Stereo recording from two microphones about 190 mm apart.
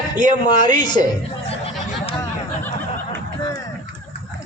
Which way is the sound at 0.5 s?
20° left (ahead or behind).